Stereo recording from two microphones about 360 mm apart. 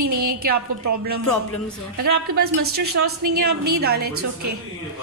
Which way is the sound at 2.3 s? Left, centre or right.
Right.